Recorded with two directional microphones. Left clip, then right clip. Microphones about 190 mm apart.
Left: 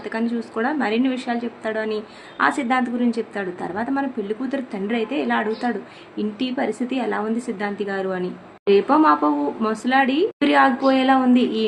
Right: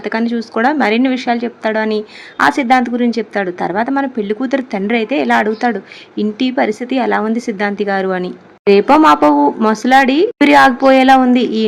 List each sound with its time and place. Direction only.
0.0 s speech: 35° right (ahead or behind)